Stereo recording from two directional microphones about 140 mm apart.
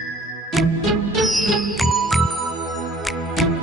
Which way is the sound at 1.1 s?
Centre (ahead or behind).